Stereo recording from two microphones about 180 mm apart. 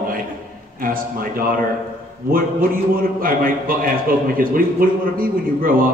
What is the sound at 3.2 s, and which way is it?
A man's voice, 50° right (ahead or behind).